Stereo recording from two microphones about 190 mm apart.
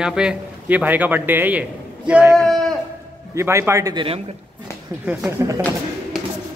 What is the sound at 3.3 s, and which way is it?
Speech, 15° right (ahead or behind).